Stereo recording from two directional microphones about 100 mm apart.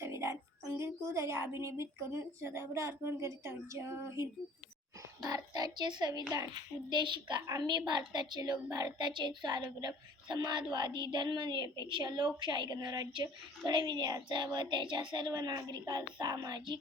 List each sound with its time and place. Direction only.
0.0 s a sound: 30° right (ahead or behind)
0.8 s a woman's voice: 30° right (ahead or behind)
5.2 s speech: 40° right (ahead or behind)
6.9 s speech: 50° right (ahead or behind)